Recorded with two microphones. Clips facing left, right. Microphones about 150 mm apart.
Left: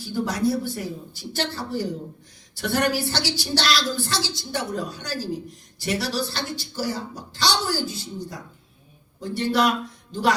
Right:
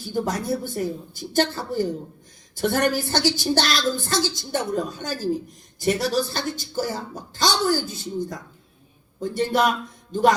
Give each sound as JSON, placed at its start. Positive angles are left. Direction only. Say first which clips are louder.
{"t": 0.1, "sound": "a woman's voice", "louder": "left 1 dB", "side_deg": -50}